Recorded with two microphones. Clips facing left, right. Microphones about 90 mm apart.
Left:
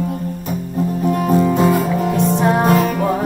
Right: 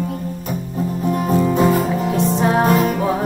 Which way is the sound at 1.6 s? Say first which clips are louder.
Left 1 dB; centre (ahead or behind).